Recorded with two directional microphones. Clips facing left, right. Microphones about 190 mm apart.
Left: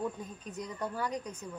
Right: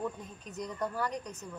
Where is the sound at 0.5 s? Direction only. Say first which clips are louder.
Right 2 dB; 10° left (ahead or behind).